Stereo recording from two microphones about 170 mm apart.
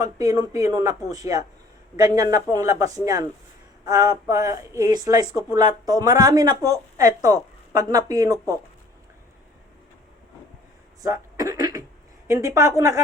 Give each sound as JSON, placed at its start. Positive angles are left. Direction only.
{"t": 0.0, "sound": "speech", "side_deg": -20}
{"t": 11.0, "sound": "a sound", "side_deg": -20}
{"t": 12.3, "sound": "a woman's voice", "side_deg": -15}